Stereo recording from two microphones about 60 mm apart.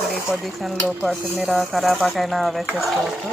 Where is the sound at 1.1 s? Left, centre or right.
Centre.